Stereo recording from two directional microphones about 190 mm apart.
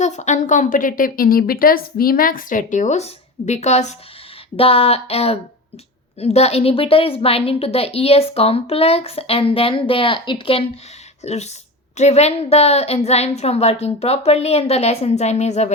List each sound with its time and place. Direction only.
0.0 s a woman's voice: 40° left (ahead or behind)